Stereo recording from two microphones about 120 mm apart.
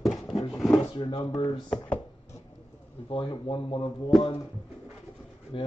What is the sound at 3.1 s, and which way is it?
Speech, 45° left (ahead or behind).